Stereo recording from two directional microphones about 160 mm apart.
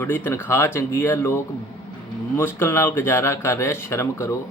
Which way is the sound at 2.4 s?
15° left (ahead or behind).